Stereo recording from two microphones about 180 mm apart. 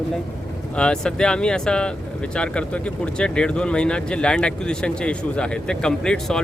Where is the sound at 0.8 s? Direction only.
5° left (ahead or behind).